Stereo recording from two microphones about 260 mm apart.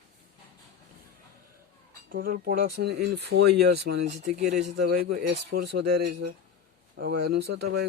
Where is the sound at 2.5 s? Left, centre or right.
Right.